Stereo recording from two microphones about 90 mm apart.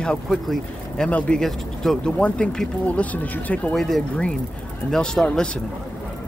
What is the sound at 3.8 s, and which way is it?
Speech, centre (ahead or behind).